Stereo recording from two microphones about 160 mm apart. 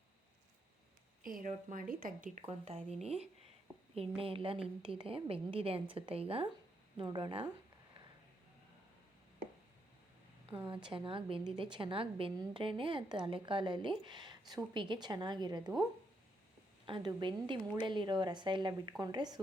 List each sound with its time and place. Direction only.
1.2 s a woman's voice: 60° right (ahead or behind)
2.5 s a woman's voice: 40° right (ahead or behind)
10.7 s a woman's voice: 30° right (ahead or behind)
16.8 s a woman's voice: 30° right (ahead or behind)